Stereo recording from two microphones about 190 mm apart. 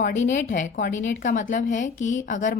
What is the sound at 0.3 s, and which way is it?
A woman's voice, 40° left (ahead or behind).